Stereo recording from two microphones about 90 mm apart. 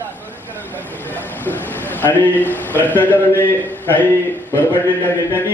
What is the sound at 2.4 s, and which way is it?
A man's voice, 20° left (ahead or behind).